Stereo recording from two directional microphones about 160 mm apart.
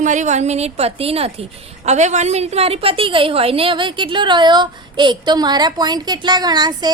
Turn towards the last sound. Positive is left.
turn(degrees=-25)  # may be behind; listen again after turning